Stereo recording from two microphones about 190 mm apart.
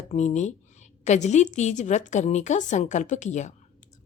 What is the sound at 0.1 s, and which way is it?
A woman's voice, 40° left (ahead or behind).